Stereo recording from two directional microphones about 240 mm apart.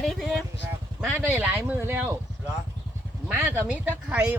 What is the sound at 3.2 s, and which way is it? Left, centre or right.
Speech, centre.